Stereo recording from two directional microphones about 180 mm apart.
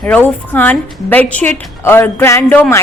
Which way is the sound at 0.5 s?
10° left (ahead or behind).